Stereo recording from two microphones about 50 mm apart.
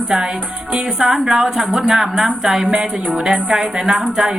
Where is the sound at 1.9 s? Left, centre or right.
Centre.